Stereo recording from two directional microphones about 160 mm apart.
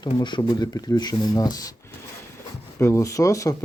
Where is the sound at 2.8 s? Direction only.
15° left (ahead or behind).